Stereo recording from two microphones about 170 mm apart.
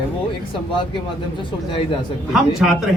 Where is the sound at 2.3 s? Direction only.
Centre (ahead or behind).